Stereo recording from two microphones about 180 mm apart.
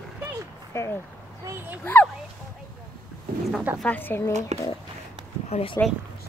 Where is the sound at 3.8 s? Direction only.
10° left (ahead or behind).